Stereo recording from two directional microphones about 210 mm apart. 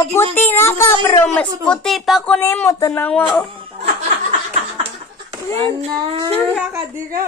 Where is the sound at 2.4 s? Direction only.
15° left (ahead or behind).